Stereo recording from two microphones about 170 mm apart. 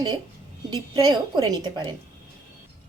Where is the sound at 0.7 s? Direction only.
25° right (ahead or behind).